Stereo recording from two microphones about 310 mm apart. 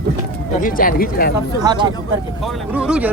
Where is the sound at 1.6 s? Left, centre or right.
Centre.